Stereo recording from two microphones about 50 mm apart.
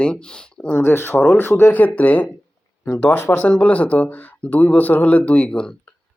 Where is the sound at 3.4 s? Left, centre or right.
Left.